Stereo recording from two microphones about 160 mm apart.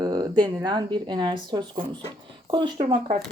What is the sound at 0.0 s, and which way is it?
Speech, 25° right (ahead or behind).